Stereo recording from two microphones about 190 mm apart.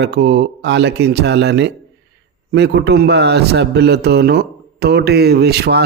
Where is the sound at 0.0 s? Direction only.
60° right (ahead or behind).